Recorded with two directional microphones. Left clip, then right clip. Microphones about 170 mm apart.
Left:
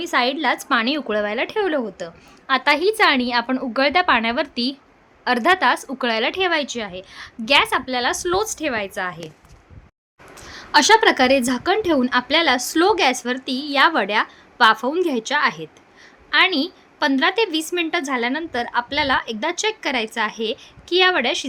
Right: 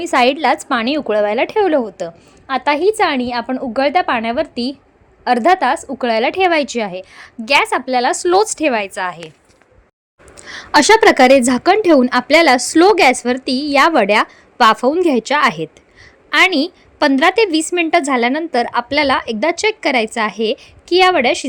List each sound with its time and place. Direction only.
0.0 s a woman's voice: 40° right (ahead or behind)
2.5 s a woman's voice: 20° right (ahead or behind); by 9.2 s 40° right (ahead or behind)
10.4 s a sound: 50° right (ahead or behind)
10.8 s a woman's voice: 35° right (ahead or behind)